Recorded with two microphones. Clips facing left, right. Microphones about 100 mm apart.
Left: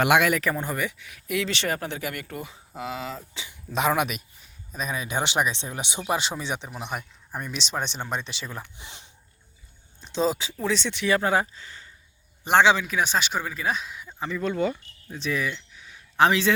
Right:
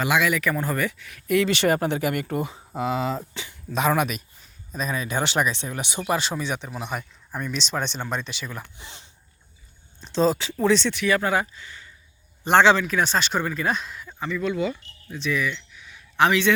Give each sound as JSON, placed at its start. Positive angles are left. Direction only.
{"t": 0.0, "sound": "speech", "side_deg": 55}
{"t": 0.5, "sound": "speech", "side_deg": 20}
{"t": 1.5, "sound": "speech", "side_deg": -10}
{"t": 2.0, "sound": "speech", "side_deg": -45}
{"t": 3.3, "sound": "a sound", "side_deg": 10}
{"t": 3.7, "sound": "speech", "side_deg": 20}
{"t": 4.7, "sound": "speech", "side_deg": 10}
{"t": 10.8, "sound": "speech", "side_deg": 25}
{"t": 12.5, "sound": "speech", "side_deg": 10}
{"t": 14.2, "sound": "speech", "side_deg": 30}
{"t": 14.4, "sound": "speech", "side_deg": 40}